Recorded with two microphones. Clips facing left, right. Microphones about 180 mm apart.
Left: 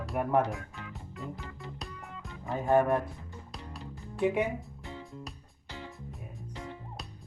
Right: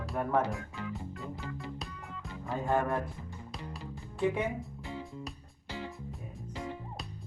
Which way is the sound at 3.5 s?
Centre (ahead or behind).